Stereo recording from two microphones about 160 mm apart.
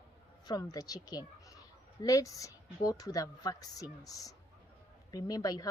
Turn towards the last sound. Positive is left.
turn(degrees=25)  # may be behind; listen again after turning